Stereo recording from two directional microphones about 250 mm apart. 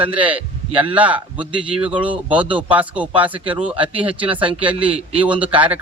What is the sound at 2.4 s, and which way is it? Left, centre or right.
A man's voice, centre.